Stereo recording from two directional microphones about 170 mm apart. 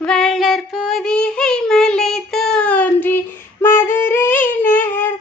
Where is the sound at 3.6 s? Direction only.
15° left (ahead or behind).